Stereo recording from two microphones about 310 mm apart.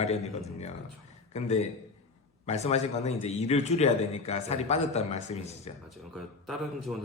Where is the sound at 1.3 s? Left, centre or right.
Left.